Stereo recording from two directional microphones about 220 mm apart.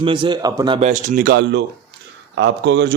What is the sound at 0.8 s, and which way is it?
Speech, 35° right (ahead or behind).